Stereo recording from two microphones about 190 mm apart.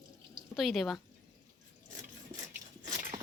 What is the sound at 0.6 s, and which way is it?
Speech, centre (ahead or behind).